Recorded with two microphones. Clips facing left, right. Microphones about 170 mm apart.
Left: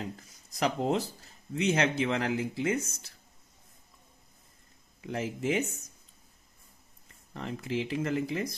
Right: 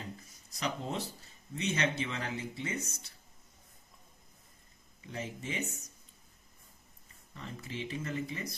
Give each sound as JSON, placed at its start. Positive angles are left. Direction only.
{"t": 0.0, "sound": "a sound", "side_deg": 90}
{"t": 1.5, "sound": "speech", "side_deg": 90}
{"t": 5.0, "sound": "speech", "side_deg": 90}
{"t": 7.3, "sound": "speech", "side_deg": 90}